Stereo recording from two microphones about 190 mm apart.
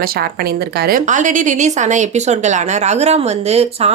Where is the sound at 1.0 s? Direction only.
40° right (ahead or behind).